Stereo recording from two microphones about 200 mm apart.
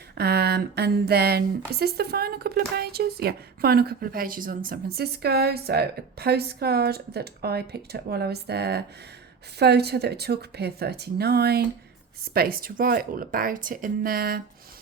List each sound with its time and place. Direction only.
0.2 s speech: 55° right (ahead or behind)